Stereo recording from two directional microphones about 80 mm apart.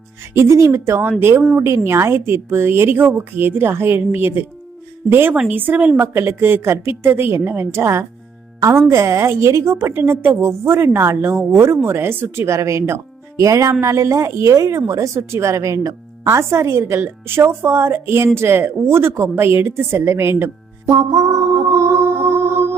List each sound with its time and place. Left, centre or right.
0.3 s a woman's voice: right; by 6.0 s centre
6.0 s a woman's voice: right
16.2 s a woman's voice: right
20.8 s music: right